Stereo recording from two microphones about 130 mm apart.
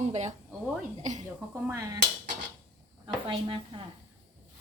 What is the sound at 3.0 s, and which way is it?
Speech, 40° right (ahead or behind).